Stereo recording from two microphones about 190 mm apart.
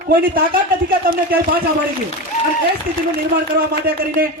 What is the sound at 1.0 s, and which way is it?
Speech, 50° right (ahead or behind).